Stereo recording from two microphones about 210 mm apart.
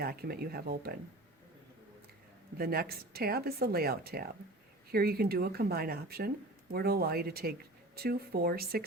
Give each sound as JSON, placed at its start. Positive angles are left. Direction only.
{"t": 0.0, "sound": "speech", "side_deg": -45}
{"t": 2.6, "sound": "speech", "side_deg": -45}